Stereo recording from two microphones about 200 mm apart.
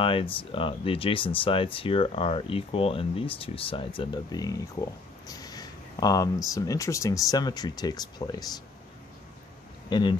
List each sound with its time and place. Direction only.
0.0 s speech: 25° left (ahead or behind)
9.8 s speech: 20° left (ahead or behind)